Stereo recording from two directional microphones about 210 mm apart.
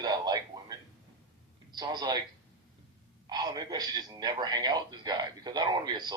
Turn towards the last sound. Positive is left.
turn(degrees=-20)  # may be behind; listen again after turning